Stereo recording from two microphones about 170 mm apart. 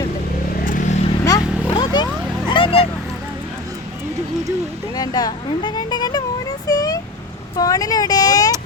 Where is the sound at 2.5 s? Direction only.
30° left (ahead or behind).